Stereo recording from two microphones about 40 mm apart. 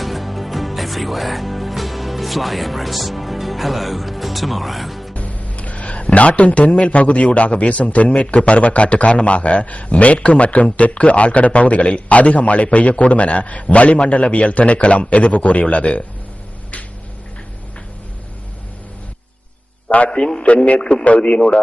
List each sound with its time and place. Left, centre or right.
0.0 s speech: centre
5.1 s a man's voice: left
20.1 s a man's voice: centre
20.7 s speech: left